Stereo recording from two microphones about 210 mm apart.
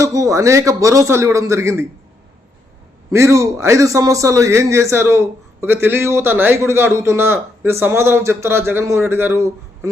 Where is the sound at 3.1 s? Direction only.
15° right (ahead or behind).